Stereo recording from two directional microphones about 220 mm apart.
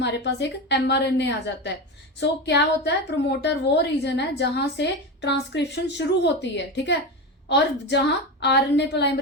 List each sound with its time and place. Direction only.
0.0 s a woman's voice: 50° left (ahead or behind)